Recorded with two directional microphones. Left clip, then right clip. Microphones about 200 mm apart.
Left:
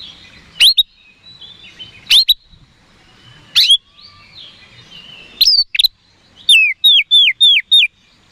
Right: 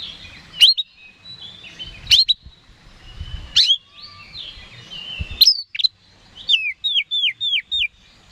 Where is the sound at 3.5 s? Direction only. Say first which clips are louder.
Left 4 dB; 40° left (ahead or behind).